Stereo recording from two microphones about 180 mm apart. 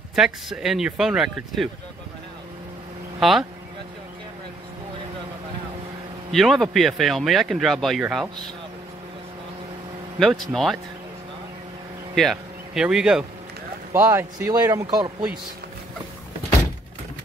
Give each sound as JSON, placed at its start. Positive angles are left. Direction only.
{"t": 0.1, "sound": "speech", "side_deg": 0}
{"t": 3.2, "sound": "speech", "side_deg": 0}
{"t": 6.3, "sound": "speech", "side_deg": 0}
{"t": 10.1, "sound": "speech", "side_deg": 0}
{"t": 12.2, "sound": "speech", "side_deg": 0}
{"t": 13.9, "sound": "speech", "side_deg": -15}